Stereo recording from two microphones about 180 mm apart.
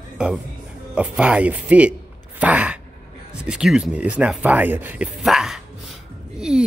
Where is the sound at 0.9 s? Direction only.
5° right (ahead or behind).